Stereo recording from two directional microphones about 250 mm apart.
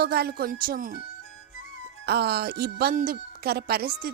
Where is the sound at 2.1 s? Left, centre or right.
Right.